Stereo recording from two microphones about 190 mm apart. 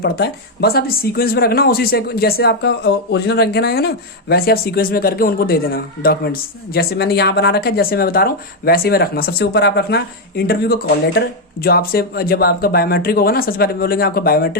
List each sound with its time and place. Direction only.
0.0 s speech: 55° left (ahead or behind)